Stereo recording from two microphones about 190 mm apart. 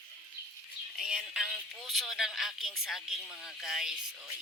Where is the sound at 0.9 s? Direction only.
5° right (ahead or behind).